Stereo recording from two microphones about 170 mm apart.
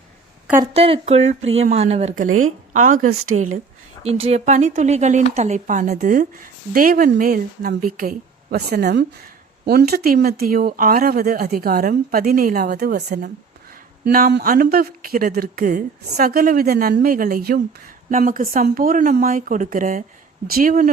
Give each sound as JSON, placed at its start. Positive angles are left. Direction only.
{"t": 0.7, "sound": "speech", "side_deg": -35}
{"t": 4.0, "sound": "speech", "side_deg": -35}
{"t": 6.7, "sound": "a woman's voice", "side_deg": -60}